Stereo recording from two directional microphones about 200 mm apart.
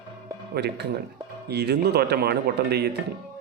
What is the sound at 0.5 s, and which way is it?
Speech, 55° right (ahead or behind).